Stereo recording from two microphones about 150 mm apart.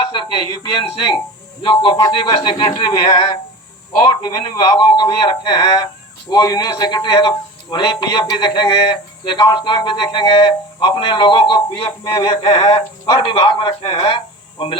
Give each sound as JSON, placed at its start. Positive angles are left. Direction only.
{"t": 0.1, "sound": "speech", "side_deg": 30}
{"t": 4.1, "sound": "a man's voice", "side_deg": 30}